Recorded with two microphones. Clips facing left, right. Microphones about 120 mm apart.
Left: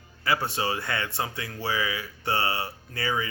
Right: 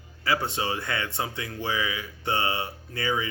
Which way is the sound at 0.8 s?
30° left (ahead or behind).